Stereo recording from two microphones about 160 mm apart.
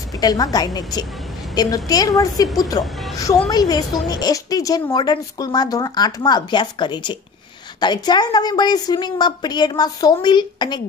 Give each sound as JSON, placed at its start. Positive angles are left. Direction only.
{"t": 0.2, "sound": "a woman's voice", "side_deg": 25}